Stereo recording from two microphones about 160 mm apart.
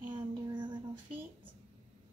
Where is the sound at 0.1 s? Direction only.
30° right (ahead or behind).